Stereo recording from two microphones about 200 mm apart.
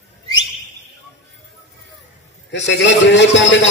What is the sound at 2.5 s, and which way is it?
A man's voice, 65° left (ahead or behind).